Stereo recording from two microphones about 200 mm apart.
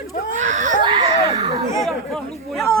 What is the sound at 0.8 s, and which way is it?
Speech, 25° right (ahead or behind).